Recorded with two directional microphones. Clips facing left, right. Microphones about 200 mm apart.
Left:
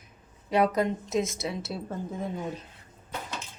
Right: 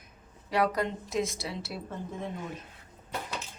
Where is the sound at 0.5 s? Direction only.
20° left (ahead or behind).